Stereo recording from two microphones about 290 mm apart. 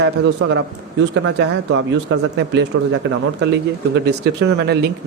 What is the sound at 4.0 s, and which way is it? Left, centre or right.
Speech, right.